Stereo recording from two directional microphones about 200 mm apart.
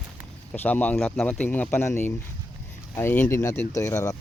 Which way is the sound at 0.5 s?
10° left (ahead or behind).